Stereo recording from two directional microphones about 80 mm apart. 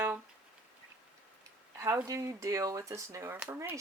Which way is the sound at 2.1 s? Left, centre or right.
Right.